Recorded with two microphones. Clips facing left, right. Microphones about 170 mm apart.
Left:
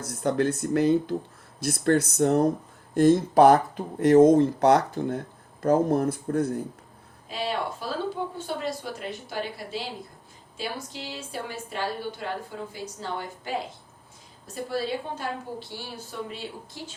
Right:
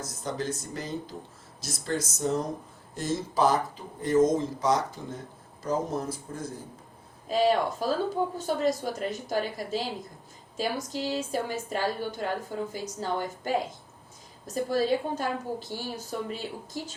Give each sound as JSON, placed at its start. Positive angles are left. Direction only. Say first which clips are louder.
{"t": 0.0, "sound": "speech", "louder": "left 8 dB", "side_deg": 60}
{"t": 7.3, "sound": "a woman's voice", "louder": "right 6 dB", "side_deg": -40}